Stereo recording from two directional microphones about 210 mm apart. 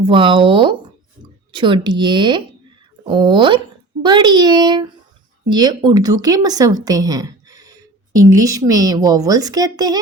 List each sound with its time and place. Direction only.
0.0 s a child's voice: 25° right (ahead or behind)